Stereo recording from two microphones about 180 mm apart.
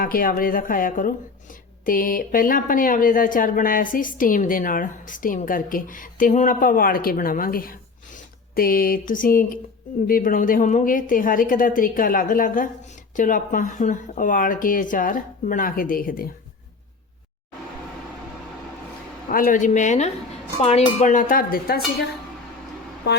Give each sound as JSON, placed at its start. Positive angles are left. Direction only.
{"t": 0.0, "sound": "speech", "side_deg": 50}
{"t": 19.3, "sound": "speech", "side_deg": 50}